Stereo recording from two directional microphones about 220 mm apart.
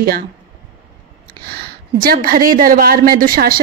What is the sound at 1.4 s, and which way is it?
A woman's voice, 45° right (ahead or behind).